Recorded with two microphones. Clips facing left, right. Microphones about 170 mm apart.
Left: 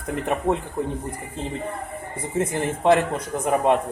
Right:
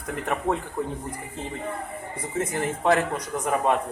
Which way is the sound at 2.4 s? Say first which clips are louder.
Left 3 dB; 25° left (ahead or behind).